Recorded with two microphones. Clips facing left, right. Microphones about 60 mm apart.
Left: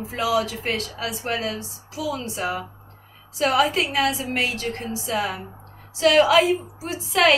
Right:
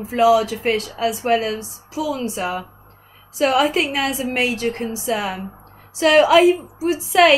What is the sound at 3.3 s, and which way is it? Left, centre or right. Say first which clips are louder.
A woman's voice: right 3 dB; right.